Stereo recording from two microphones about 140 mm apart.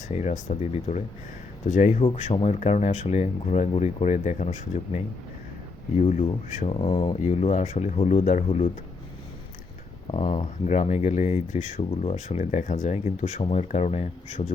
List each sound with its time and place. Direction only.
0.1 s speech: 55° left (ahead or behind)
1.6 s speech: 65° left (ahead or behind)
2.0 s speech: 40° left (ahead or behind); by 4.8 s 60° left (ahead or behind)
6.0 s speech: 55° left (ahead or behind); by 7.2 s 35° left (ahead or behind)
7.2 s speech: 60° left (ahead or behind)
10.1 s speech: 40° left (ahead or behind)
10.7 s speech: 60° left (ahead or behind)